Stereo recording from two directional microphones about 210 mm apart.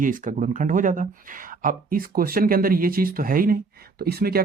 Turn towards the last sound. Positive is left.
turn(degrees=-45)  # may be behind; listen again after turning